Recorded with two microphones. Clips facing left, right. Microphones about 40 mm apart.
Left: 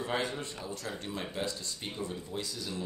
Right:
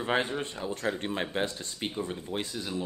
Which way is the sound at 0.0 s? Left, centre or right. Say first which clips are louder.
Right 5 dB; right.